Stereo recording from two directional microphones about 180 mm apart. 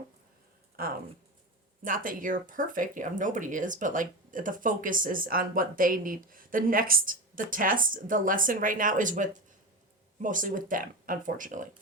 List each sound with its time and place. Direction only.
0.8 s speech: 55° right (ahead or behind)